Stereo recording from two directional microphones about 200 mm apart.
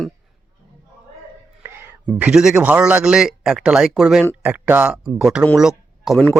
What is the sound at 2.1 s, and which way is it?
A man's voice, 5° right (ahead or behind).